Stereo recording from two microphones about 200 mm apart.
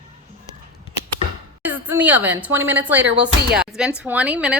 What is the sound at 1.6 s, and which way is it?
A woman's voice, 10° right (ahead or behind).